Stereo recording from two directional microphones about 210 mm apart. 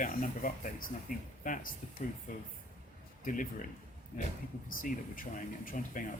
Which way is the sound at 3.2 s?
40° left (ahead or behind).